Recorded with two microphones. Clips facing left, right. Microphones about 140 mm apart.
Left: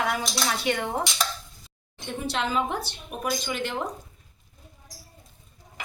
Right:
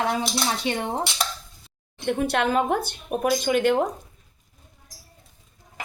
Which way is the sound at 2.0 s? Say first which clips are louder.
Right 7 dB; 60° right (ahead or behind).